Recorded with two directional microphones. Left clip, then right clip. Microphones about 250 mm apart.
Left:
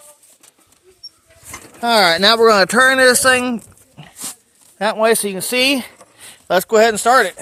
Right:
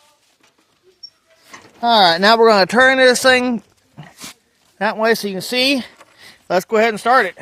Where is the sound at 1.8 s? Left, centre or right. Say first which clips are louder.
Right 1 dB; centre.